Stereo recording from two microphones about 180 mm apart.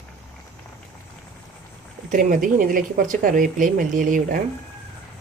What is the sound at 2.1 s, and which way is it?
Speech, 50° right (ahead or behind).